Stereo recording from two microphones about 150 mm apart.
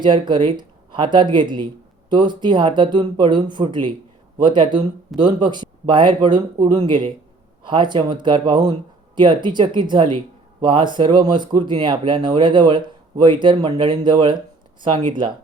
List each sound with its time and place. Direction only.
0.0 s speech: 30° right (ahead or behind)